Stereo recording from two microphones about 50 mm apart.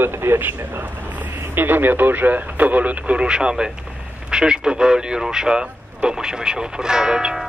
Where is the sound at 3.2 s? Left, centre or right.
Centre.